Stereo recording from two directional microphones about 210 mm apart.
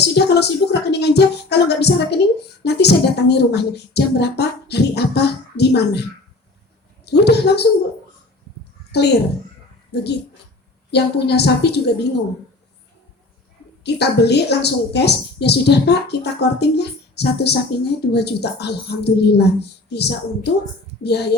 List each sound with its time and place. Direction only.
0.0 s a woman's voice: 50° left (ahead or behind)
7.0 s a woman's voice: 50° left (ahead or behind)
8.9 s a woman's voice: 50° left (ahead or behind)
13.8 s a woman's voice: 50° left (ahead or behind)